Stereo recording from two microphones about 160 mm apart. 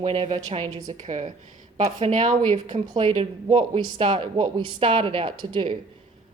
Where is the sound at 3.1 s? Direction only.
35° right (ahead or behind).